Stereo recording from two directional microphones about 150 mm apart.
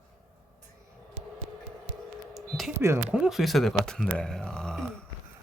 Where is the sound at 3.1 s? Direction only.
5° right (ahead or behind).